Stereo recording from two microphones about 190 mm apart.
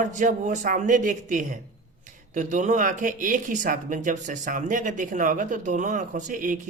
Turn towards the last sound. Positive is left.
turn(degrees=-45)  # may be behind; listen again after turning